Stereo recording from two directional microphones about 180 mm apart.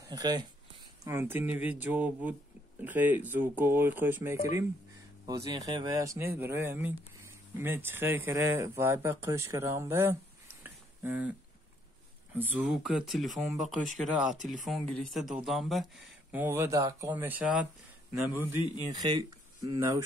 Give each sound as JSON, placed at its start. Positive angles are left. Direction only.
{"t": 0.0, "sound": "speech", "side_deg": -20}
{"t": 1.0, "sound": "speech", "side_deg": -10}
{"t": 10.6, "sound": "a sound", "side_deg": -10}
{"t": 12.4, "sound": "speech", "side_deg": -10}
{"t": 18.9, "sound": "speech", "side_deg": -25}